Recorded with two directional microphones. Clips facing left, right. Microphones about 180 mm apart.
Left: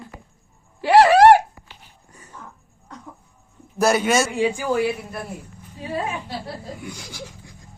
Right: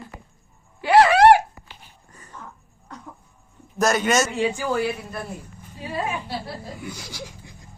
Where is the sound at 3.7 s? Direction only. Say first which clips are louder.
Left 2 dB; 10° left (ahead or behind).